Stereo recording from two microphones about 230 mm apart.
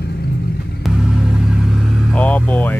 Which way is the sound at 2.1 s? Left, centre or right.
Centre.